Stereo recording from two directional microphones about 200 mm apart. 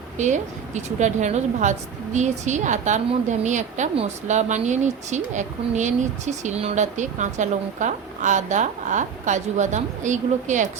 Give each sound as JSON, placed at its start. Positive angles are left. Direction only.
{"t": 0.2, "sound": "a woman's voice", "side_deg": -35}